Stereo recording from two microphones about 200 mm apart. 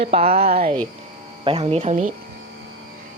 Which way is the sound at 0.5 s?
45° right (ahead or behind).